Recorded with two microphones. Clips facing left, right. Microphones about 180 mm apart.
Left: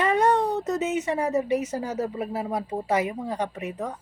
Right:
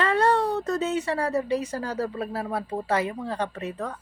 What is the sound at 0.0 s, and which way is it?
Speech, 15° left (ahead or behind).